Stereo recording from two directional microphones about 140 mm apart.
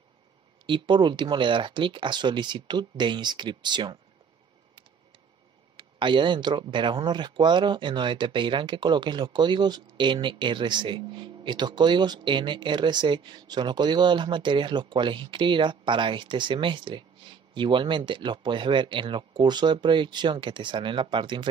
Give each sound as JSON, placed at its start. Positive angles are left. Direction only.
{"t": 0.7, "sound": "speech", "side_deg": -35}
{"t": 5.8, "sound": "speech", "side_deg": -35}